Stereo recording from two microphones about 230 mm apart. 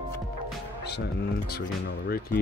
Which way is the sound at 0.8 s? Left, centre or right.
Left.